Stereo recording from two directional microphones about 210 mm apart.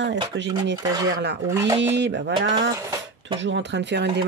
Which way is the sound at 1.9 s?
55° right (ahead or behind).